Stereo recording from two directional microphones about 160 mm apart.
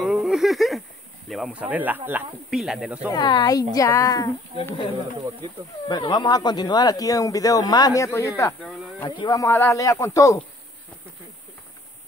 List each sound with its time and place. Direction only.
0.0 s a sound: centre (ahead or behind)
1.3 s speech: 5° right (ahead or behind)
3.1 s speech: 25° left (ahead or behind)
5.9 s speech: 25° left (ahead or behind)